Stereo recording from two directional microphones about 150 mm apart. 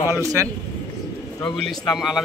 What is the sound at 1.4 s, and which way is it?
Speech, 5° left (ahead or behind).